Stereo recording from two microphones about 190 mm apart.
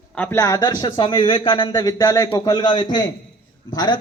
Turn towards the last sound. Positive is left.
turn(degrees=20)  # may be behind; listen again after turning